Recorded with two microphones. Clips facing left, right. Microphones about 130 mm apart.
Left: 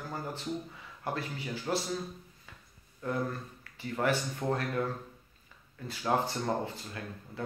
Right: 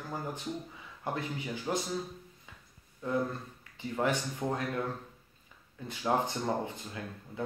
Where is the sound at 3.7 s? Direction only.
15° right (ahead or behind).